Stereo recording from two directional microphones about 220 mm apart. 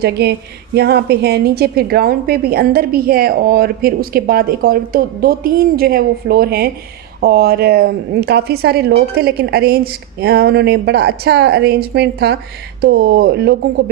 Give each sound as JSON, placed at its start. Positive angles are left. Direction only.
{"t": 0.0, "sound": "a woman's voice", "side_deg": -50}